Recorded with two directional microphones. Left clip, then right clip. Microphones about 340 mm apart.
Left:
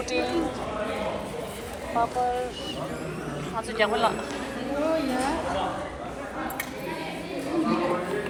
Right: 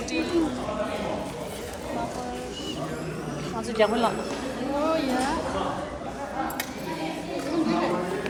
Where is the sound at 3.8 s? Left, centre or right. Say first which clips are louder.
Right 1 dB; centre.